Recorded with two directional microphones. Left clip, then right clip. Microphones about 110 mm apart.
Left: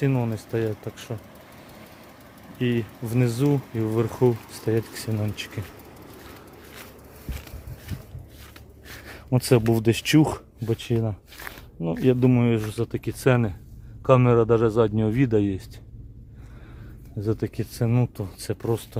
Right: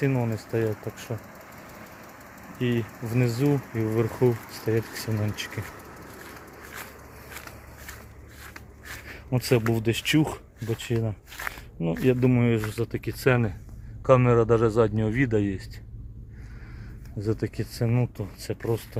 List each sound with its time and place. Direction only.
0.0 s a man's voice: 25° left (ahead or behind)
0.7 s vehicle: 5° left (ahead or behind)
2.6 s speech: 25° left (ahead or behind)
9.0 s speech: 50° left (ahead or behind)
10.8 s speech: 40° left (ahead or behind)
11.3 s a sound: 60° right (ahead or behind)
12.0 s a man's voice: 30° left (ahead or behind); by 14.9 s 15° left (ahead or behind)
14.9 s speech: 25° left (ahead or behind)
17.2 s speech: 30° left (ahead or behind); by 18.8 s 45° left (ahead or behind)